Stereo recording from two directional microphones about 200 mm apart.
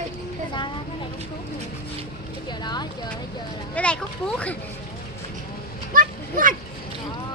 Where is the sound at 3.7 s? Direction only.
5° left (ahead or behind).